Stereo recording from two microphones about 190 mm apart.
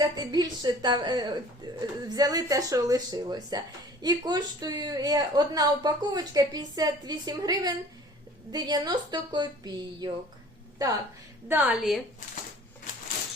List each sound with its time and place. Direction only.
0.0 s speech: 20° right (ahead or behind)
11.4 s a woman's voice: 5° right (ahead or behind)